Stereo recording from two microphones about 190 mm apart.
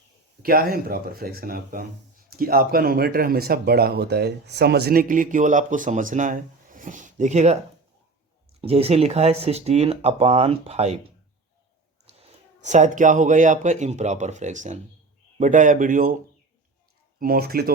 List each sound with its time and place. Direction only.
0.4 s speech: 50° right (ahead or behind)
8.6 s speech: 30° right (ahead or behind)
12.6 s speech: 40° right (ahead or behind)
17.2 s speech: 50° right (ahead or behind)